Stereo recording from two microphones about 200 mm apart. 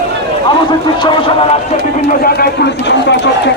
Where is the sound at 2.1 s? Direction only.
50° left (ahead or behind).